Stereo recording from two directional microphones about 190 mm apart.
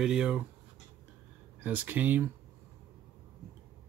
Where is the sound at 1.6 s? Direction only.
10° right (ahead or behind).